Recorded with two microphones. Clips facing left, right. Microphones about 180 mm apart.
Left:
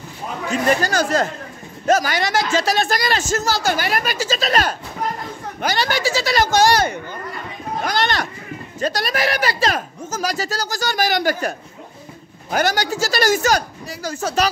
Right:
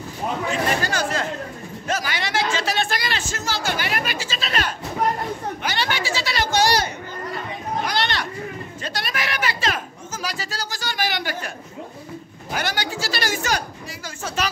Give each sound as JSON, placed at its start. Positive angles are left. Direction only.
{"t": 0.5, "sound": "a man's voice", "side_deg": 40}
{"t": 7.8, "sound": "a sound", "side_deg": 45}
{"t": 8.8, "sound": "a man's voice", "side_deg": 40}